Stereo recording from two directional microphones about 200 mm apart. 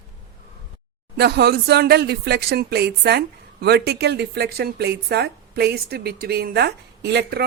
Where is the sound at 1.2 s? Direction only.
55° right (ahead or behind).